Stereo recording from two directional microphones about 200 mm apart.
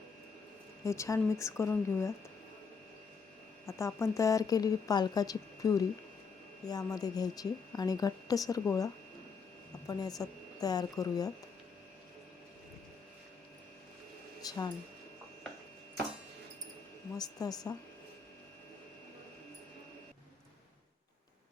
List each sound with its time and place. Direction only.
0.9 s a woman's voice: 15° left (ahead or behind)
3.7 s a woman's voice: 15° left (ahead or behind)
14.4 s a sound: 20° left (ahead or behind)
17.2 s a woman's voice: 20° left (ahead or behind)